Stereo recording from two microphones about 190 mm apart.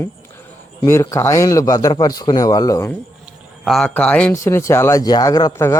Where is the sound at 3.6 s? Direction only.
Centre (ahead or behind).